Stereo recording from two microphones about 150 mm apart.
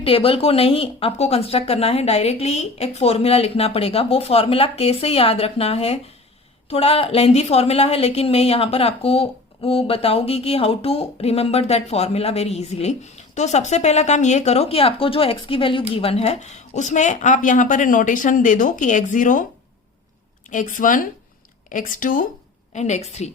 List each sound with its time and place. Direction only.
0.0 s a woman's voice: 40° left (ahead or behind); by 19.5 s 60° left (ahead or behind)
20.5 s speech: 60° left (ahead or behind)
22.7 s a woman's voice: 50° left (ahead or behind)